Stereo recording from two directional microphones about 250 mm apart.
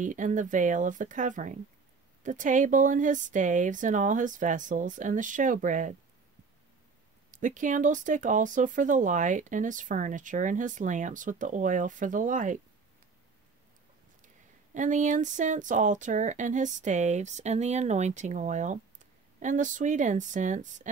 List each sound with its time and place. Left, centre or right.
0.0 s speech: right
7.2 s speech: right
14.2 s speech: right